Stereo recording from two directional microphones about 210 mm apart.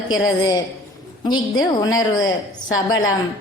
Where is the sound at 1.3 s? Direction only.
20° left (ahead or behind).